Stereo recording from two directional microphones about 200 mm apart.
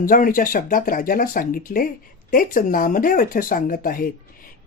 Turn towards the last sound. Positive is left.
turn(degrees=45)  # may be behind; listen again after turning